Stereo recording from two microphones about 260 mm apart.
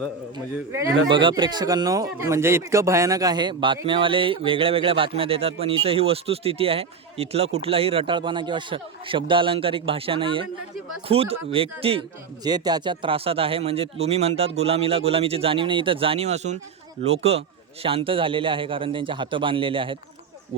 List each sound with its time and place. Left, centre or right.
0.3 s speech: centre